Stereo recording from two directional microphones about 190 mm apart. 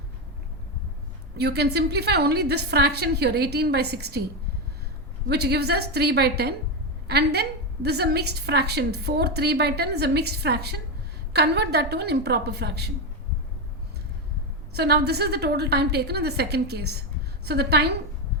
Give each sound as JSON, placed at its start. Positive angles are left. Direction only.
{"t": 1.4, "sound": "a woman's voice", "side_deg": -60}
{"t": 5.3, "sound": "a woman's voice", "side_deg": -60}
{"t": 14.7, "sound": "a woman's voice", "side_deg": -60}